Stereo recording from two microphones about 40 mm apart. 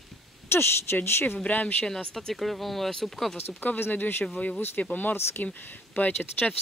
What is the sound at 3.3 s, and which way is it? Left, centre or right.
Speech, left.